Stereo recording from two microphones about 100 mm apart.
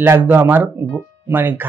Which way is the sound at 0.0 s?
20° right (ahead or behind).